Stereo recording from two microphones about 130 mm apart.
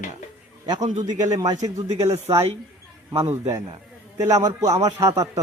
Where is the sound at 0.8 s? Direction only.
65° right (ahead or behind).